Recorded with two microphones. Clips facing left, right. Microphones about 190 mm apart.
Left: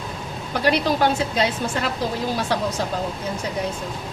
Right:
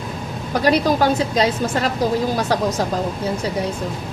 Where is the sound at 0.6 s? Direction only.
40° right (ahead or behind).